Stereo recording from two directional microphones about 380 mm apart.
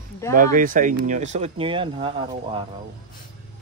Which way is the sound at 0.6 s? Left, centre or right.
Right.